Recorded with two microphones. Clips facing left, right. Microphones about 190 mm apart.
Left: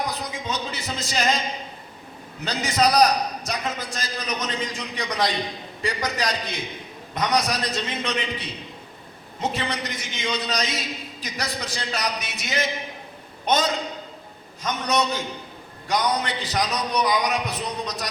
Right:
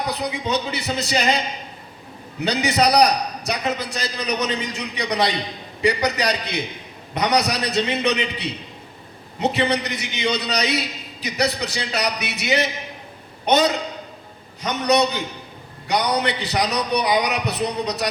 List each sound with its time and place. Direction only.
0.1 s a man's voice: 65° right (ahead or behind)